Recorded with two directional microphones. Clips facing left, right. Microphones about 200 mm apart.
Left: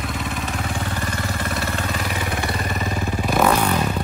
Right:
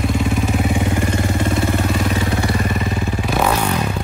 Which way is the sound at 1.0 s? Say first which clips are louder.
Right 7 dB; 25° right (ahead or behind).